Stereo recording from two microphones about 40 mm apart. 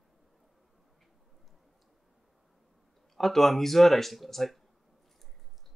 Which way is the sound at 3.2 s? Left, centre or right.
Centre.